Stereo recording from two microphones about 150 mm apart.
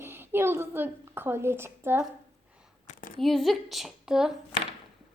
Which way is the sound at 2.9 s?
65° left (ahead or behind).